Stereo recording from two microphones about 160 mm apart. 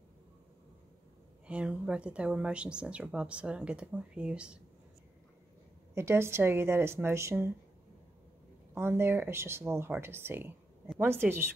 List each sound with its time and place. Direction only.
1.5 s speech: 5° right (ahead or behind)
5.9 s speech: 15° right (ahead or behind)
8.7 s speech: 15° right (ahead or behind)